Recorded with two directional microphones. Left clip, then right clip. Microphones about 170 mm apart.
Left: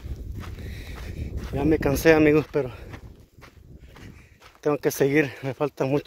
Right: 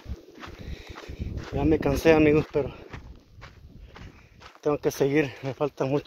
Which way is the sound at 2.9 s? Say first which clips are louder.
Left 1 dB; 15° left (ahead or behind).